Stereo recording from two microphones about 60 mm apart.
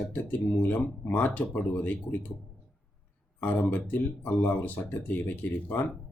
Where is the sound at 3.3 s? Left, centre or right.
Left.